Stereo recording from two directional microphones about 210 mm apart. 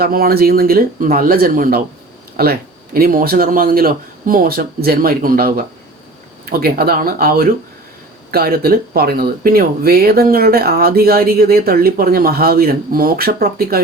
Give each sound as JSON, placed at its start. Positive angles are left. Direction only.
{"t": 0.0, "sound": "speech", "side_deg": -45}